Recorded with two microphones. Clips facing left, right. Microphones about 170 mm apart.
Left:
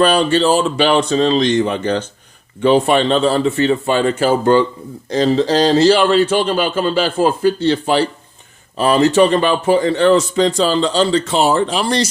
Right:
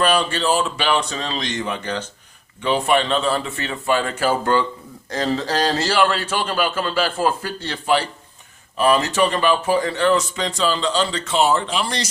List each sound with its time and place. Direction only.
0.0 s a man's voice: 30° left (ahead or behind)